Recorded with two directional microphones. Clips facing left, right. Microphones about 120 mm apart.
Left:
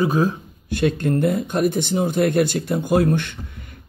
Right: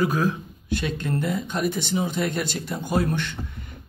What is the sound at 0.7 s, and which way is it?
Speech, 50° left (ahead or behind).